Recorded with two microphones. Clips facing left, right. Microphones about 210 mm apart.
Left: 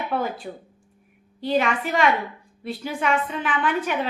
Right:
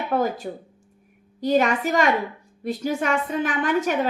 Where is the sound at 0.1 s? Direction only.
40° right (ahead or behind).